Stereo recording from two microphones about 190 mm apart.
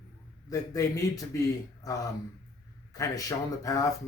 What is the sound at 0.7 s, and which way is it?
Speech, 20° left (ahead or behind).